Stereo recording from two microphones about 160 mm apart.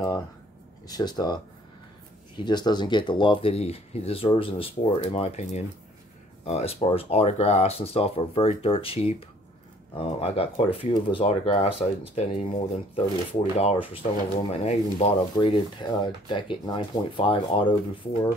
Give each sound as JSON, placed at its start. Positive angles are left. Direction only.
{"t": 0.8, "sound": "speech", "side_deg": 25}